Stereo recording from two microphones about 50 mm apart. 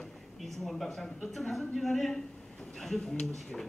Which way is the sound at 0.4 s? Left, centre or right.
Centre.